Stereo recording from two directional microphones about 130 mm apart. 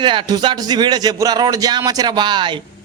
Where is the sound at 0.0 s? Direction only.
35° right (ahead or behind).